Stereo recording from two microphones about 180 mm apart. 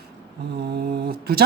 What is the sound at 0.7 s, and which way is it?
Speech, 55° right (ahead or behind).